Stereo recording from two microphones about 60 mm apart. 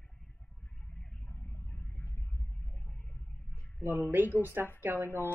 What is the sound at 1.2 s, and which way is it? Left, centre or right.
Vehicle, left.